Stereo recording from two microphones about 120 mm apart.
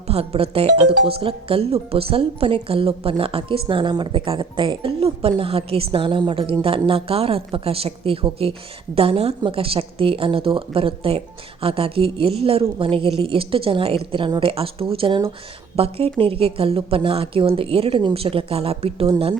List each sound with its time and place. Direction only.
0.1 s speech: 55° right (ahead or behind)